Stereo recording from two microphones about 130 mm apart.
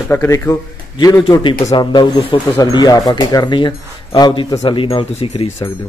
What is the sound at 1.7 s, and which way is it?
Speech, 35° left (ahead or behind).